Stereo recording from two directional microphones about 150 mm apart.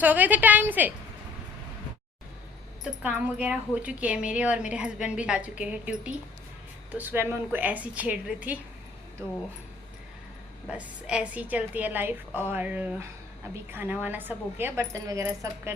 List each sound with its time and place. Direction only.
0.0 s speech: 10° right (ahead or behind)
3.0 s speech: 10° right (ahead or behind)
9.2 s speech: 20° right (ahead or behind)
10.7 s speech: 5° right (ahead or behind)